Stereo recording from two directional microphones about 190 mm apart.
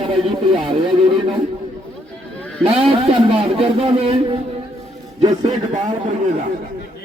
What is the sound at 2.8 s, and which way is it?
Speech, 30° right (ahead or behind).